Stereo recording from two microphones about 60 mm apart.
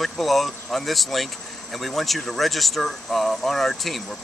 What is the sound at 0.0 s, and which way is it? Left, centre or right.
Speech, centre.